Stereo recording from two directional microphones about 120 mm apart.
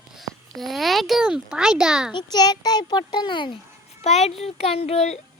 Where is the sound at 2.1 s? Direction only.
35° left (ahead or behind).